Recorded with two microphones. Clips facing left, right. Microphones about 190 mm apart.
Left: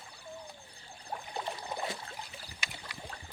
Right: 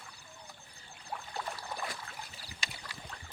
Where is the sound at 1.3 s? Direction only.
20° left (ahead or behind).